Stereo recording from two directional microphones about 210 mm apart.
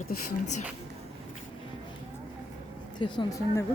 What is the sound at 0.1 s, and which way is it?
Speech, 40° left (ahead or behind).